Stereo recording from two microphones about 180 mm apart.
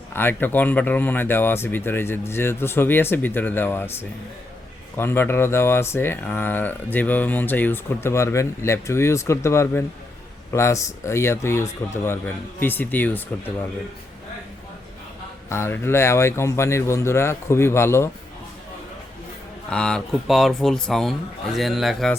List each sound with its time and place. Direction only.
0.1 s speech: 10° left (ahead or behind)
15.4 s speech: 15° left (ahead or behind)
19.7 s speech: 5° left (ahead or behind)